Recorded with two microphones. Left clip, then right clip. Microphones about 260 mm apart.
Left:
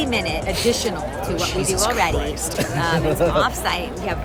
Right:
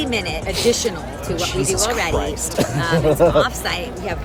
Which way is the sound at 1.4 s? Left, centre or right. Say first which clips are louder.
Right 2 dB; centre.